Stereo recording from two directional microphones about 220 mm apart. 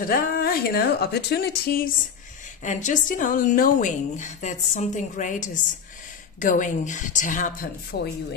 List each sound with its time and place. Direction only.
0.0 s a woman's voice: 40° left (ahead or behind)
2.6 s a woman's voice: 35° left (ahead or behind)